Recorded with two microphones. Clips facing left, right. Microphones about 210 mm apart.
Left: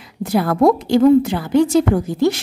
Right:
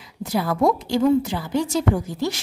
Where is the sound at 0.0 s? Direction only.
60° left (ahead or behind).